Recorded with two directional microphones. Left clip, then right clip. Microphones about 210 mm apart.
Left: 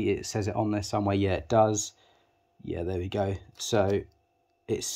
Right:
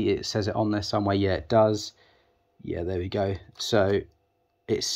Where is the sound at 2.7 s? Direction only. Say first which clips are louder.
Right 2 dB; centre (ahead or behind).